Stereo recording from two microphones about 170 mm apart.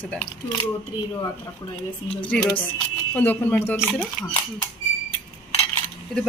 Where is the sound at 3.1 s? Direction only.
10° left (ahead or behind).